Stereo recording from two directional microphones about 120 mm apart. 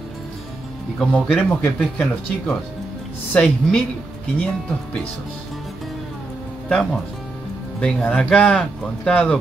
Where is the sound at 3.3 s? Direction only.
5° left (ahead or behind).